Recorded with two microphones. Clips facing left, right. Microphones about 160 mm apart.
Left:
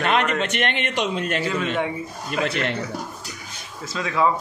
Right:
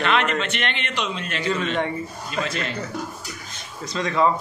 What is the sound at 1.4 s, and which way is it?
Speech, 5° left (ahead or behind).